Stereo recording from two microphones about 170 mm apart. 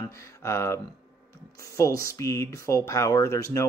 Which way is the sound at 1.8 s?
20° left (ahead or behind).